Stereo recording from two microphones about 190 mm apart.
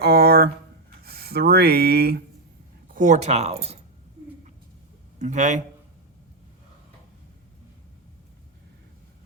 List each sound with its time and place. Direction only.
0.0 s a sound: 55° right (ahead or behind)
1.0 s speech: 55° right (ahead or behind)
2.9 s speech: 40° right (ahead or behind)
5.2 s speech: 40° right (ahead or behind)